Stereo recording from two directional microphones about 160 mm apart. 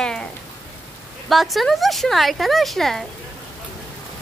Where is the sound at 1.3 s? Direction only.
Centre (ahead or behind).